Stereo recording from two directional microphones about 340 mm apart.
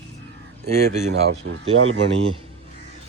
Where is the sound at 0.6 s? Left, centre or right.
Centre; by 2.0 s right.